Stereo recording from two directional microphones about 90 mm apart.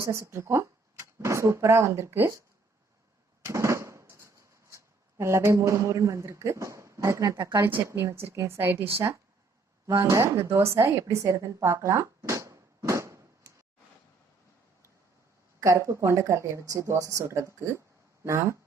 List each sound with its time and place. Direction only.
0.0 s speech: 30° right (ahead or behind)
3.4 s drum: 35° right (ahead or behind)
4.1 s a sound: 35° right (ahead or behind)
7.2 s a woman's voice: 45° right (ahead or behind)
7.6 s a woman's voice: 25° right (ahead or behind)
15.6 s speech: 35° right (ahead or behind)